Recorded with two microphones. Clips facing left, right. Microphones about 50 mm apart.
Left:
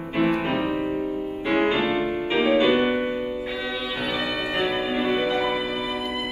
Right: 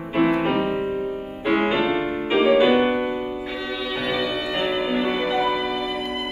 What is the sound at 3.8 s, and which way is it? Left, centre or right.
Music, right.